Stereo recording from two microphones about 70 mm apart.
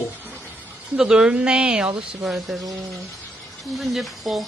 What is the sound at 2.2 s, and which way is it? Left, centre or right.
Music, centre.